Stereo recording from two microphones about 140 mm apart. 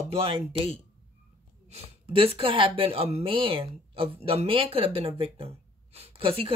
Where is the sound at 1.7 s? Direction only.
45° right (ahead or behind).